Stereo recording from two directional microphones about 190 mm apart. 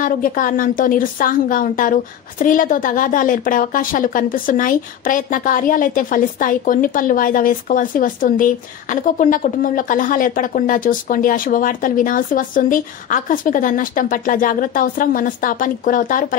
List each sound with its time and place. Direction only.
0.0 s a woman's voice: 45° left (ahead or behind)